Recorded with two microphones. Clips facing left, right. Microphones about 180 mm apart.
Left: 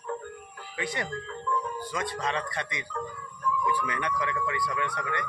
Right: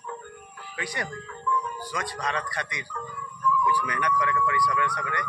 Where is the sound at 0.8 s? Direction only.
25° left (ahead or behind).